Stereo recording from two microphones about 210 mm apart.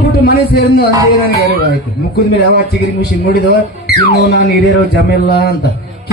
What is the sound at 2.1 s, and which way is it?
Speech, 50° left (ahead or behind).